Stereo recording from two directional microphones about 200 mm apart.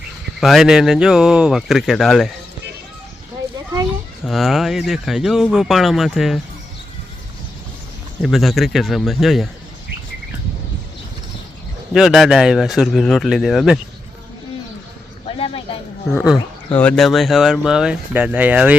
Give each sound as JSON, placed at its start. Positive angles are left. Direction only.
{"t": 0.3, "sound": "speech", "side_deg": 0}
{"t": 4.3, "sound": "speech", "side_deg": 0}
{"t": 8.2, "sound": "speech", "side_deg": 0}
{"t": 11.9, "sound": "speech", "side_deg": 0}
{"t": 15.3, "sound": "a sound", "side_deg": 25}
{"t": 16.7, "sound": "speech", "side_deg": 5}